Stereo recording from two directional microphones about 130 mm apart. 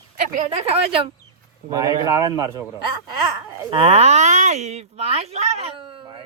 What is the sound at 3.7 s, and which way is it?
Speech, 50° right (ahead or behind).